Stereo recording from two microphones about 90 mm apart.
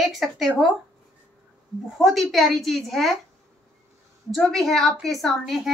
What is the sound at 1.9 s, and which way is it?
A woman's voice, centre (ahead or behind).